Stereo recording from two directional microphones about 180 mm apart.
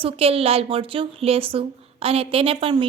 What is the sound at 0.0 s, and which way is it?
A woman's voice, 35° right (ahead or behind).